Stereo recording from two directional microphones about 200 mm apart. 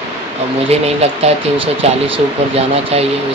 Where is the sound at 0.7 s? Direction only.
30° right (ahead or behind).